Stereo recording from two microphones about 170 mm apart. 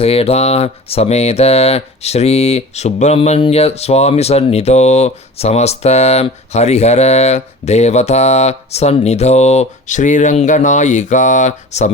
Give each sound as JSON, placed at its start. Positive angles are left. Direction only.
{"t": 0.0, "sound": "mantra", "side_deg": 35}